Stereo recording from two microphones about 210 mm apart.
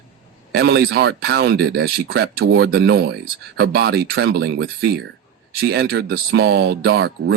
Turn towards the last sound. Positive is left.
turn(degrees=-55)  # may be behind; listen again after turning